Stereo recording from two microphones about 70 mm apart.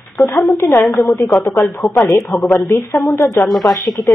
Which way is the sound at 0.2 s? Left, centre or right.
Left.